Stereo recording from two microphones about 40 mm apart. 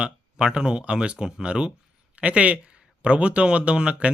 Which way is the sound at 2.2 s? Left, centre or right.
Right.